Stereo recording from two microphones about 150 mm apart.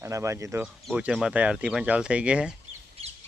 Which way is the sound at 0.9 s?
5° right (ahead or behind).